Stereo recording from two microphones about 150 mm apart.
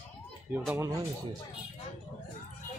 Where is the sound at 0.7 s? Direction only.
15° right (ahead or behind).